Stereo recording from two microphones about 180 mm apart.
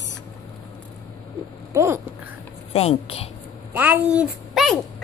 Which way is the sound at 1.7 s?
15° right (ahead or behind).